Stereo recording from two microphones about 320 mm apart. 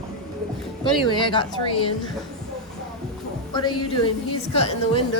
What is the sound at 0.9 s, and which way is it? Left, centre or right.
Speech, centre.